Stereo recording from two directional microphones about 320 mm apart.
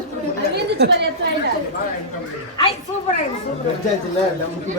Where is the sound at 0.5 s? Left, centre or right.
Right.